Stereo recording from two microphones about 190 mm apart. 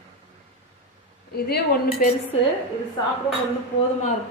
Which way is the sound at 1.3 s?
55° left (ahead or behind).